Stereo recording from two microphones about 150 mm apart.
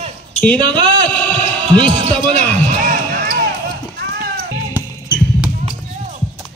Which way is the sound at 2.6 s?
60° right (ahead or behind).